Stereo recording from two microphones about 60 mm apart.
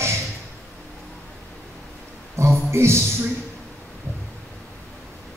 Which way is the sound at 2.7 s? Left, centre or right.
Right.